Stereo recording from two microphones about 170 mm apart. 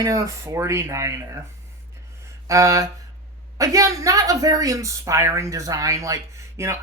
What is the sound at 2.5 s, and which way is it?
A woman's voice, 20° right (ahead or behind).